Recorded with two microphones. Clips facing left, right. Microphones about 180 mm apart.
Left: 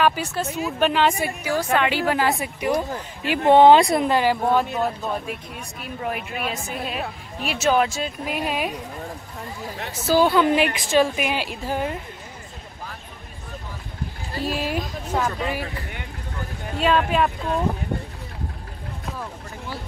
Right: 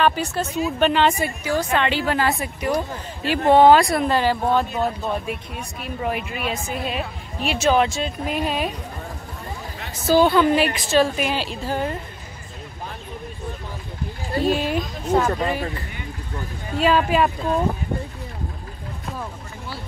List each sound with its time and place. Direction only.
0.0 s a woman's voice: 5° left (ahead or behind)
4.7 s a woman's voice: centre (ahead or behind)
10.0 s a woman's voice: 5° left (ahead or behind)
10.5 s a woman's voice: 15° left (ahead or behind)
14.4 s a woman's voice: 5° left (ahead or behind)
16.7 s a woman's voice: centre (ahead or behind)